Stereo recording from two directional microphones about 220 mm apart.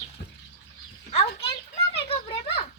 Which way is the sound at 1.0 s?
25° left (ahead or behind).